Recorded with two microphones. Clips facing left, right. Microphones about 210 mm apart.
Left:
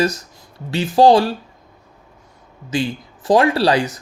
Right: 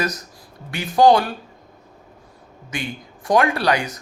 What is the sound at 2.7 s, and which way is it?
A man's voice, 30° left (ahead or behind).